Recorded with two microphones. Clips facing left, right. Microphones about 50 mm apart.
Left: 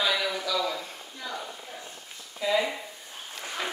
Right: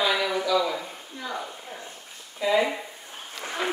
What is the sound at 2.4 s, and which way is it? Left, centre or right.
Speech, centre.